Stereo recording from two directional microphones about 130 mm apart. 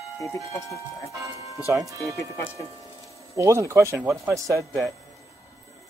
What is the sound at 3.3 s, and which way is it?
Speech, 20° right (ahead or behind).